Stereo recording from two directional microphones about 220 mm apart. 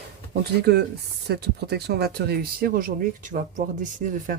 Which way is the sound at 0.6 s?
50° right (ahead or behind).